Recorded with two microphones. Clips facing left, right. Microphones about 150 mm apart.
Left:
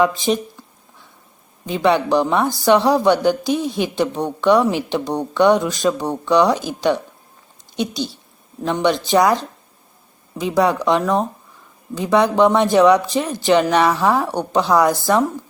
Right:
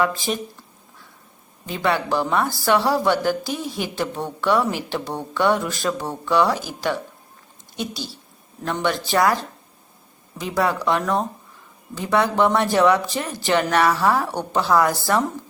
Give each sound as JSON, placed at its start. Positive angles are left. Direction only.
{"t": 1.6, "sound": "speech", "side_deg": 20}
{"t": 8.6, "sound": "speech", "side_deg": 15}